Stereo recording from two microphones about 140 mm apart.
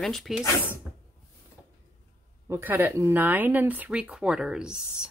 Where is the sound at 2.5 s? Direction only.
15° right (ahead or behind).